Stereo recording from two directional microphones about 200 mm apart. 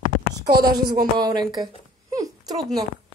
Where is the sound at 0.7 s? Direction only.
20° right (ahead or behind).